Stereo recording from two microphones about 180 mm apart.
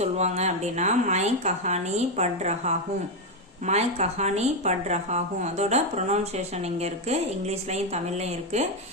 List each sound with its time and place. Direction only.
0.0 s speech: 40° right (ahead or behind)